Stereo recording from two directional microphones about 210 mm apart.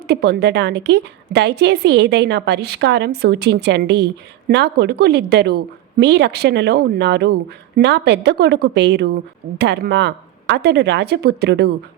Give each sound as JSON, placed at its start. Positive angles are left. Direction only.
{"t": 0.1, "sound": "a woman's voice", "side_deg": -50}